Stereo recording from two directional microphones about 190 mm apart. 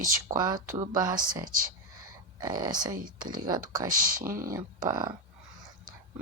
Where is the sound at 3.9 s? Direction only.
45° right (ahead or behind).